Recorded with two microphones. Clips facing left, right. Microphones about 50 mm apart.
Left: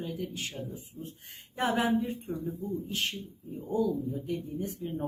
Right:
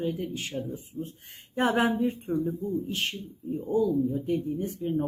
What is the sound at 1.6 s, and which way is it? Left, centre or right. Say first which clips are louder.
Speech: right 3 dB; right.